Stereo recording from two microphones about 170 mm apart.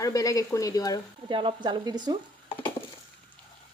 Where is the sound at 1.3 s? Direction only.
30° right (ahead or behind).